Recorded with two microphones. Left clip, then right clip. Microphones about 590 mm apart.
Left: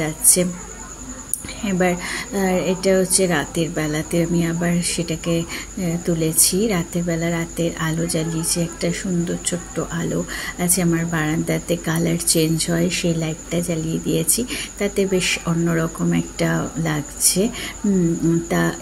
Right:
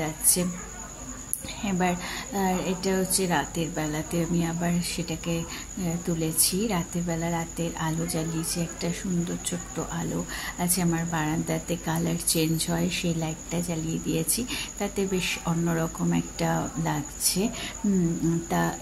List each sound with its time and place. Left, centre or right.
0.0 s speech: right
1.6 s speech: right
18.5 s speech: right